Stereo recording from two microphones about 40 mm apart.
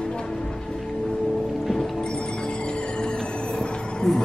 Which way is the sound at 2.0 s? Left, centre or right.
Left.